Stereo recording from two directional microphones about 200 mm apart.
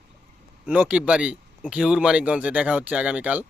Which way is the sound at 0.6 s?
5° right (ahead or behind).